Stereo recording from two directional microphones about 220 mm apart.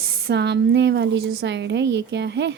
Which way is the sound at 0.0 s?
45° right (ahead or behind).